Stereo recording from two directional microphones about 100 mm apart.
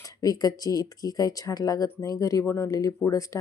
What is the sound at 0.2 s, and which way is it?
Speech, 40° left (ahead or behind).